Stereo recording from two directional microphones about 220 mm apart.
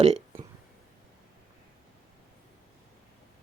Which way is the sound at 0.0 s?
30° right (ahead or behind).